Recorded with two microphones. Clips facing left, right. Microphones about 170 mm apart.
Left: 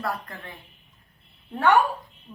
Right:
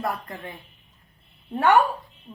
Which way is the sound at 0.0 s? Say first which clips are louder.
Right 2 dB; 20° right (ahead or behind).